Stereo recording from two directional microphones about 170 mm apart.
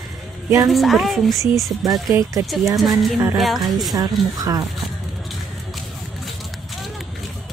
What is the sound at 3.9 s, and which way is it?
Speech, 20° right (ahead or behind).